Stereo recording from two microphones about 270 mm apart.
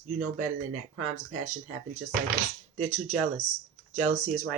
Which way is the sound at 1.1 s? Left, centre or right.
Right.